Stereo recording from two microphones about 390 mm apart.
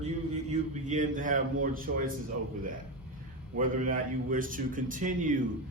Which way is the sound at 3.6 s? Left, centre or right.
Right.